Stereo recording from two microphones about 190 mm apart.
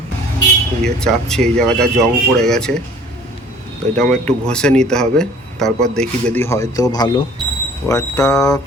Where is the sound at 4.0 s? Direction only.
5° left (ahead or behind).